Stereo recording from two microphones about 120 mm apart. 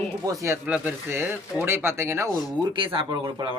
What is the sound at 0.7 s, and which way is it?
Speech, 15° right (ahead or behind).